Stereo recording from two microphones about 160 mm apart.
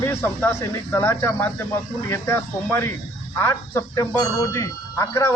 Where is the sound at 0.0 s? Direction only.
15° left (ahead or behind).